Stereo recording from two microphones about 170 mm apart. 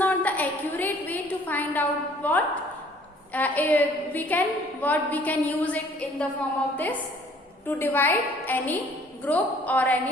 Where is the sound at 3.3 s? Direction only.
10° left (ahead or behind).